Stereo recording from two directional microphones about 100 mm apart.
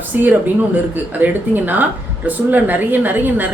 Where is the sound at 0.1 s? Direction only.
15° right (ahead or behind).